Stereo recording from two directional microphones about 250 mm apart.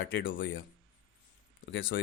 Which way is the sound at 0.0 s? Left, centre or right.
Left.